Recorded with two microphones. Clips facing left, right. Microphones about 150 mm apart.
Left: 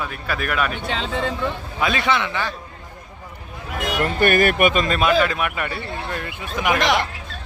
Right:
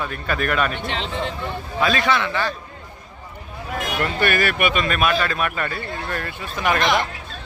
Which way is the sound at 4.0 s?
45° left (ahead or behind).